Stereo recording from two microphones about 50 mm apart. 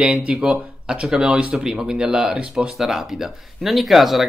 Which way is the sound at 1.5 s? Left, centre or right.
Centre.